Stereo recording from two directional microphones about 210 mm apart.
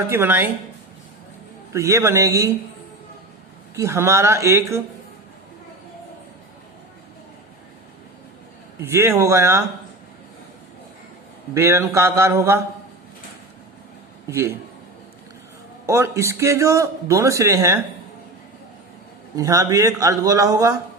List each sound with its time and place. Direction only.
0.1 s a man's voice: 10° right (ahead or behind)
1.7 s a man's voice: 15° right (ahead or behind)
3.8 s a man's voice: 15° right (ahead or behind)
8.8 s a man's voice: 10° right (ahead or behind)
11.5 s a man's voice: 15° right (ahead or behind)
14.3 s a man's voice: 10° right (ahead or behind)
15.9 s a man's voice: 10° right (ahead or behind)
19.4 s a man's voice: 15° right (ahead or behind)